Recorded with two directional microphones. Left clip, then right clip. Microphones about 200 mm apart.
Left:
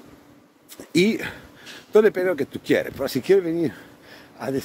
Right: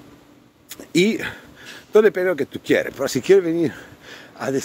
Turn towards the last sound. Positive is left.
turn(degrees=-15)  # may be behind; listen again after turning